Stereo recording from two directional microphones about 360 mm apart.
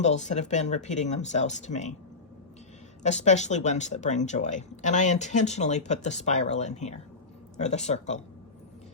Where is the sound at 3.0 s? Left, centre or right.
Centre.